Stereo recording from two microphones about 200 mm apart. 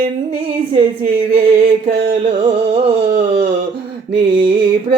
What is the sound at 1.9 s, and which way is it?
Music, 55° right (ahead or behind).